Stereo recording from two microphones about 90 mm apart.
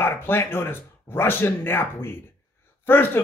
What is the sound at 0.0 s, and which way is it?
Speech, 25° left (ahead or behind).